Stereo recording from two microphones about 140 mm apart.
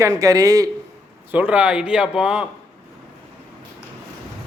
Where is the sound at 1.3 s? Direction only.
10° right (ahead or behind).